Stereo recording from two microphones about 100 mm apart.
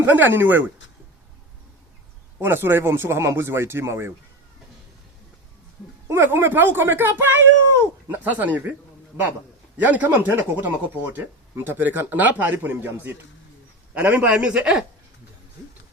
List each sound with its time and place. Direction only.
0.0 s speech: 20° right (ahead or behind)
2.4 s speech: 25° right (ahead or behind)
6.1 s a man's voice: 25° right (ahead or behind)
9.7 s a man's voice: 15° right (ahead or behind)